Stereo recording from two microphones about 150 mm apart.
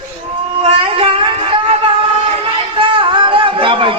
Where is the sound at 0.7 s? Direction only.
40° right (ahead or behind).